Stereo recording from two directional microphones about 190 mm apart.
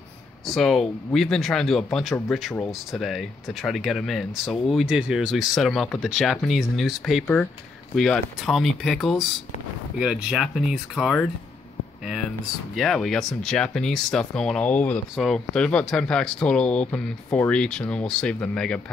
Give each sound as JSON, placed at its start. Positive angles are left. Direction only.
{"t": 0.5, "sound": "speech", "side_deg": 0}
{"t": 12.7, "sound": "speech", "side_deg": 0}